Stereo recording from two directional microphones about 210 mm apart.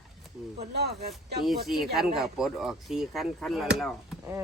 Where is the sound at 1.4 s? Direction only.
Centre (ahead or behind).